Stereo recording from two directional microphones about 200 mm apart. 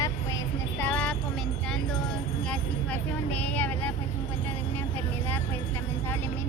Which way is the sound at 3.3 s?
5° left (ahead or behind).